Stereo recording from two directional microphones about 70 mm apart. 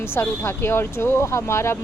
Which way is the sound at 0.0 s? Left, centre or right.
Left.